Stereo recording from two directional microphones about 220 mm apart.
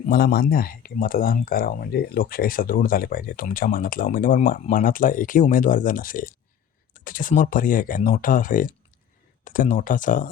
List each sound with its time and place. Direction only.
0.0 s speech: 40° left (ahead or behind)